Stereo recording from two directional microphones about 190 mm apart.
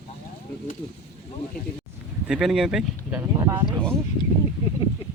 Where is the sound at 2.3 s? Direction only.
Centre (ahead or behind).